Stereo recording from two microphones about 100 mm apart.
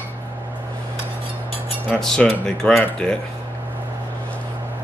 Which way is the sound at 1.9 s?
5° left (ahead or behind).